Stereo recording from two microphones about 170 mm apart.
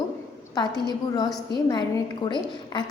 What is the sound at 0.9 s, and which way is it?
A woman's voice, 25° left (ahead or behind).